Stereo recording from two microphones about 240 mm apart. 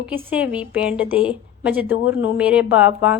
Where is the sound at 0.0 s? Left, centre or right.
Centre.